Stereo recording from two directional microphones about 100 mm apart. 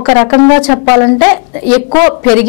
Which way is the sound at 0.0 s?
20° left (ahead or behind).